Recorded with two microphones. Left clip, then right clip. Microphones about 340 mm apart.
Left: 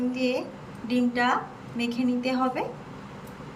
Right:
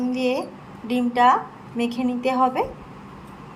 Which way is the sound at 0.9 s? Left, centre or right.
Centre.